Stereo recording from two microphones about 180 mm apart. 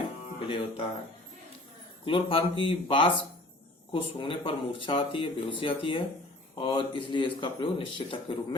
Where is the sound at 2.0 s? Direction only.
30° left (ahead or behind).